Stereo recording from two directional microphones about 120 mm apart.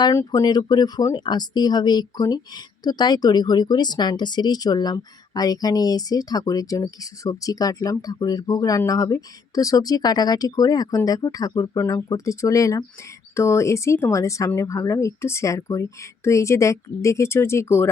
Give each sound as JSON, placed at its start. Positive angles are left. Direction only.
{"t": 0.0, "sound": "speech", "side_deg": 25}